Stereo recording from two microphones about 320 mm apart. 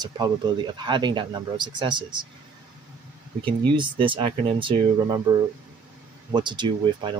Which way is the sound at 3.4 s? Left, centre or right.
Centre.